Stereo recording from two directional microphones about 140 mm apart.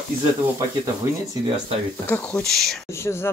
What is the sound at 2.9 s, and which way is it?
Speech, 20° left (ahead or behind).